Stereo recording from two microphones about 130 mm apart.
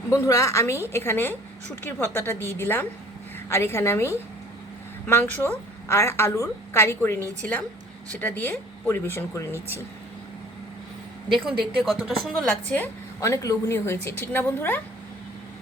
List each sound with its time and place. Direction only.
0.1 s a woman's voice: 25° left (ahead or behind)
11.3 s a woman's voice: centre (ahead or behind)
13.1 s a woman's voice: 25° left (ahead or behind)